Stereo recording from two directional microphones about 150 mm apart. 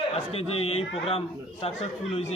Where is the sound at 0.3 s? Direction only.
40° left (ahead or behind).